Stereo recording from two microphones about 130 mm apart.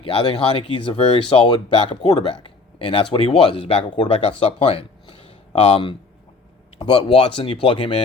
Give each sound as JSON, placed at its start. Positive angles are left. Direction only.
{"t": 0.0, "sound": "speech", "side_deg": 35}